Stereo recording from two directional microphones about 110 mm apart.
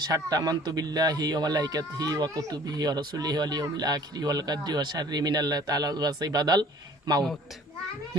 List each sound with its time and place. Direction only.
0.0 s speech: 35° right (ahead or behind)